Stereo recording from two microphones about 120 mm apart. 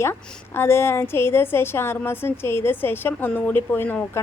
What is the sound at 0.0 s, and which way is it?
A woman's voice, 20° left (ahead or behind).